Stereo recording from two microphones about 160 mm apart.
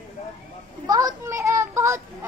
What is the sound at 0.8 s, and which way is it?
A child's voice, 25° right (ahead or behind).